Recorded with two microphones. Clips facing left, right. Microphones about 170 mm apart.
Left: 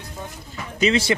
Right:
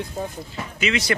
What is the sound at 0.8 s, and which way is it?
Speech, 30° left (ahead or behind).